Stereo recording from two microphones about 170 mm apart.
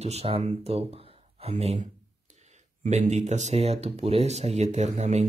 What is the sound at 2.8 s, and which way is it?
Speech, 45° right (ahead or behind).